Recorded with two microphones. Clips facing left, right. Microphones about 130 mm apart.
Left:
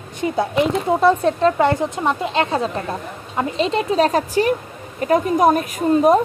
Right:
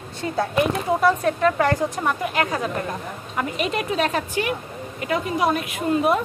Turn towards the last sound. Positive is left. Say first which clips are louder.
# left 6 dB
turn(degrees=35)  # may be behind; listen again after turning